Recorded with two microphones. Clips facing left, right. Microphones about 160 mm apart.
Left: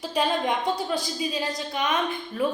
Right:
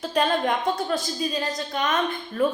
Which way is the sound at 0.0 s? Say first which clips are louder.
Right 2 dB; 5° left (ahead or behind).